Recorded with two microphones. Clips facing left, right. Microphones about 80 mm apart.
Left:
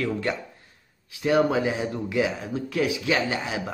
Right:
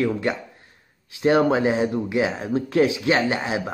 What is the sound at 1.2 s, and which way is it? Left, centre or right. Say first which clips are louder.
A man's voice: right 3 dB; right.